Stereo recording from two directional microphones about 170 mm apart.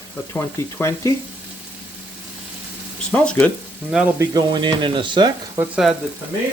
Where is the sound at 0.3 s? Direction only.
15° left (ahead or behind).